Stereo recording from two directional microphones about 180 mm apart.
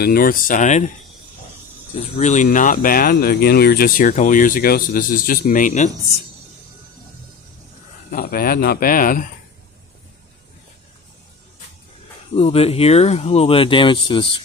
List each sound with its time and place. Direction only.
0.0 s speech: 55° left (ahead or behind)
2.1 s speech: 40° left (ahead or behind)
8.1 s speech: 55° left (ahead or behind)
12.4 s speech: 35° left (ahead or behind)